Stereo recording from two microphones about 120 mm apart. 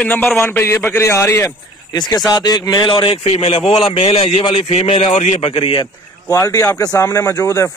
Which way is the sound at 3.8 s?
50° left (ahead or behind).